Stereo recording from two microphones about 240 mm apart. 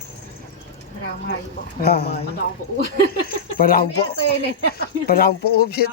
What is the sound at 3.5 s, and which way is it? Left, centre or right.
Speech, left.